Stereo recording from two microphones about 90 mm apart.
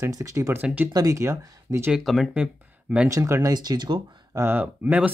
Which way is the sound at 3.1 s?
35° right (ahead or behind).